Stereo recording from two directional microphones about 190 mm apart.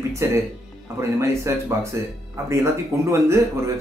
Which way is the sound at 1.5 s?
15° right (ahead or behind).